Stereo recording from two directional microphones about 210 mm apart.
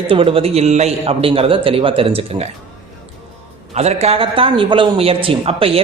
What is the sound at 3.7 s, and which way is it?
Speech, 30° right (ahead or behind).